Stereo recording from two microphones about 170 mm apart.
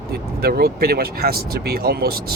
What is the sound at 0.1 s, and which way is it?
Speech, 65° right (ahead or behind).